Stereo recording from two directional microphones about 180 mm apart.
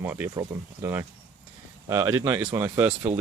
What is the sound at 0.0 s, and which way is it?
Speech, 10° right (ahead or behind).